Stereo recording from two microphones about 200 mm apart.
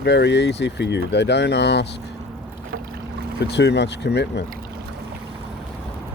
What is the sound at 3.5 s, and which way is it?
Speech, 60° left (ahead or behind).